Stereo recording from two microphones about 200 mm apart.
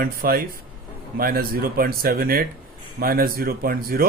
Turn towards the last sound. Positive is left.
turn(degrees=-50)  # may be behind; listen again after turning